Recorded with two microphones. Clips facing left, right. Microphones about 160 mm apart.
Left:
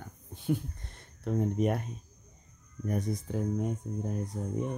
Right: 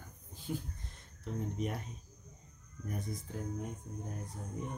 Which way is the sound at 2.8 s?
80° left.